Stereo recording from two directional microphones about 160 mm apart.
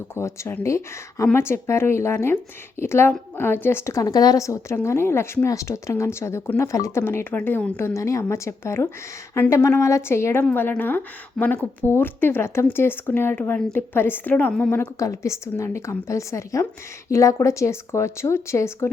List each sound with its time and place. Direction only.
0.1 s speech: 15° left (ahead or behind)